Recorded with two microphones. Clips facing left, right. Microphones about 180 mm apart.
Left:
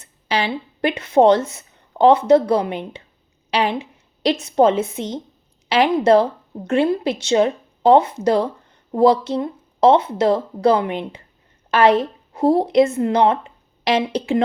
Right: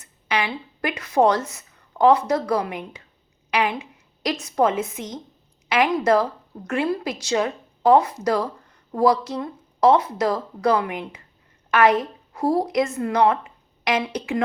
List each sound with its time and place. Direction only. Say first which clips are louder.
0.0 s a woman's voice: left 3 dB; 30° left (ahead or behind)